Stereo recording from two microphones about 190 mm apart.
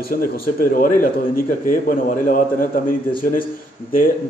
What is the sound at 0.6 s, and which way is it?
A man's voice, 50° left (ahead or behind).